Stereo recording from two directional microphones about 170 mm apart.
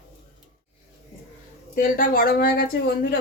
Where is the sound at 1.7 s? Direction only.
55° left (ahead or behind).